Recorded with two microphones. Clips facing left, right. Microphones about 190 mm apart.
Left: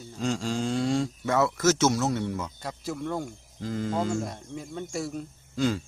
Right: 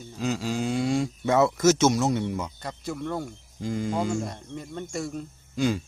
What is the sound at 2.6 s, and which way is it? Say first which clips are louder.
Speech: even; centre (ahead or behind).